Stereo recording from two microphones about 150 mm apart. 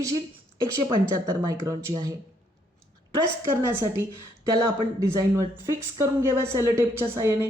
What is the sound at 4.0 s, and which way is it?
Speech, 20° right (ahead or behind).